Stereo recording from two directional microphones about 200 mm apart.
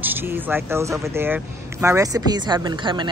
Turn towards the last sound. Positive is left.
turn(degrees=-25)  # may be behind; listen again after turning